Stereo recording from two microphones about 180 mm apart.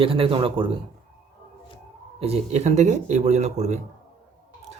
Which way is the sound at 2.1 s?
35° right (ahead or behind).